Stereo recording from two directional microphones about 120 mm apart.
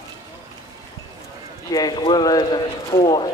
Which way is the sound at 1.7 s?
35° left (ahead or behind).